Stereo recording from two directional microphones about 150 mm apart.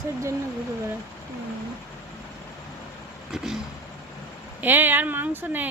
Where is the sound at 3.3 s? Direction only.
5° right (ahead or behind).